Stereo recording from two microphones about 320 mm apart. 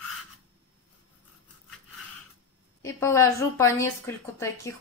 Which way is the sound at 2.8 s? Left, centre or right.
Centre.